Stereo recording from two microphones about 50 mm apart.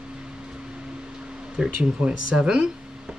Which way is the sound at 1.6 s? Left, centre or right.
Right.